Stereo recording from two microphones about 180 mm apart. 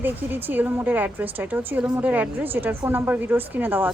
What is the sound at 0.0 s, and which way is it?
A woman's voice, 10° right (ahead or behind).